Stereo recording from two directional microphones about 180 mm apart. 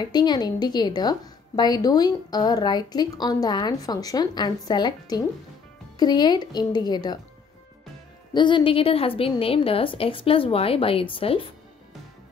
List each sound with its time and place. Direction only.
0.0 s a woman's voice: 25° left (ahead or behind)
8.3 s a woman's voice: 25° left (ahead or behind)